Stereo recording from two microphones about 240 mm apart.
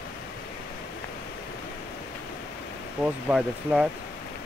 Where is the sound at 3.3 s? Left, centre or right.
Centre.